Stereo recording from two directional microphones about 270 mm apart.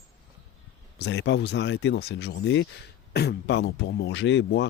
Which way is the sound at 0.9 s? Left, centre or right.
Left.